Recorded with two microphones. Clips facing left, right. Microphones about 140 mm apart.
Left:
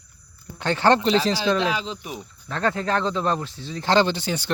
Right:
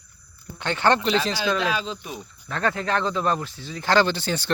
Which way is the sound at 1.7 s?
20° left (ahead or behind).